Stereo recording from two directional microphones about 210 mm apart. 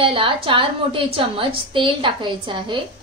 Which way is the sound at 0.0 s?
25° right (ahead or behind).